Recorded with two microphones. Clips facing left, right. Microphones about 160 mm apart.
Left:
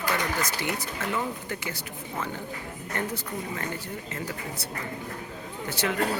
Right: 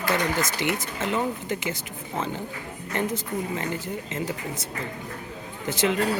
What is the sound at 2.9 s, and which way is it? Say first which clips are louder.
Speech: right 5 dB; 25° right (ahead or behind).